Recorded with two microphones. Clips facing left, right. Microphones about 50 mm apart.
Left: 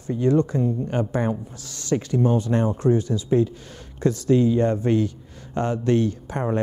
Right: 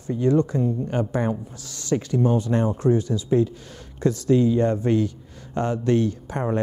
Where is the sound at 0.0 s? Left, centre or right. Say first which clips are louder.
Even; left.